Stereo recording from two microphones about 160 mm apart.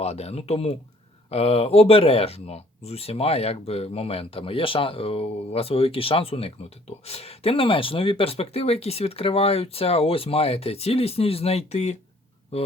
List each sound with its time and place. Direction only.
0.0 s speech: 40° left (ahead or behind)